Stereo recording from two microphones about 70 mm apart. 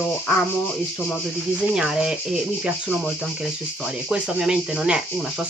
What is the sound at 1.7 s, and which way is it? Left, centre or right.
Speech, centre.